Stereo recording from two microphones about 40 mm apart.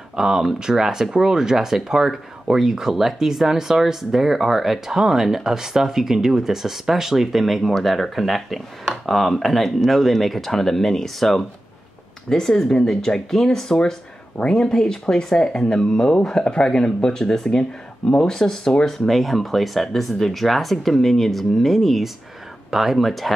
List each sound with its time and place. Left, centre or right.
0.1 s speech: centre